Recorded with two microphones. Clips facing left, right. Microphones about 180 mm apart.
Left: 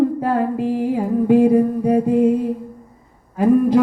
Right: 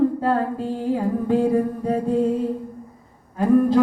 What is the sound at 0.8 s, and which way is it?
Humming, 20° left (ahead or behind).